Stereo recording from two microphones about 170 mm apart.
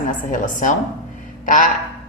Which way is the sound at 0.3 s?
50° left (ahead or behind).